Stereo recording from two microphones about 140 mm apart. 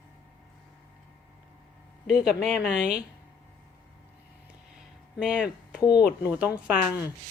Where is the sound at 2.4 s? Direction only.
5° right (ahead or behind).